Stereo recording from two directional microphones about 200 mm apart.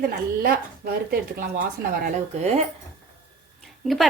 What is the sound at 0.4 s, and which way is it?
Speech, 50° right (ahead or behind).